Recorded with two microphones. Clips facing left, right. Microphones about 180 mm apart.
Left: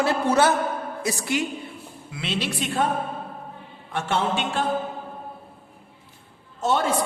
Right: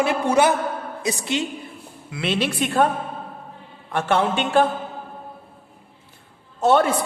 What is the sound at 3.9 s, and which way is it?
Speech, 60° right (ahead or behind).